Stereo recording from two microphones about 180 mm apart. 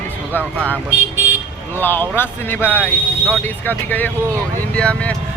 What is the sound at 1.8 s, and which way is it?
Speech, 10° left (ahead or behind).